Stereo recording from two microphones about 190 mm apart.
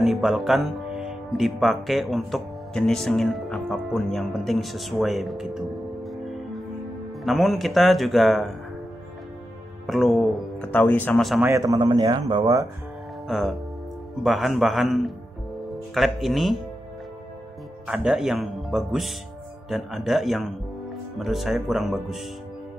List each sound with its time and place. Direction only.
0.0 s speech: centre (ahead or behind)
6.0 s music: centre (ahead or behind)
7.2 s speech: centre (ahead or behind)
9.8 s speech: centre (ahead or behind)
11.4 s a man's voice: 15° right (ahead or behind)
13.3 s speech: centre (ahead or behind)
17.8 s speech: 5° right (ahead or behind)